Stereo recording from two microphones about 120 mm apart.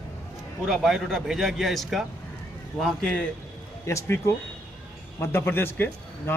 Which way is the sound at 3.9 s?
20° left (ahead or behind).